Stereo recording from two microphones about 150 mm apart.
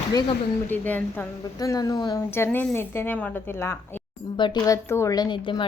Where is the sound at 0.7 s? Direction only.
10° left (ahead or behind).